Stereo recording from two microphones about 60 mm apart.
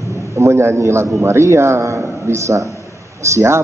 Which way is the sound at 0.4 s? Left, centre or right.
Right.